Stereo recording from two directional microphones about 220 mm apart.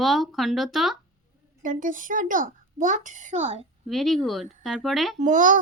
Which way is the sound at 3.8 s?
Centre (ahead or behind).